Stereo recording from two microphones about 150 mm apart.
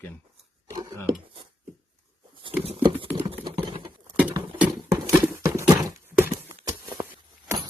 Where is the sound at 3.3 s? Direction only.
35° right (ahead or behind).